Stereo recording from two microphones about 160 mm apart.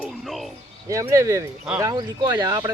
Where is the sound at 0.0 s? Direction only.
Centre (ahead or behind).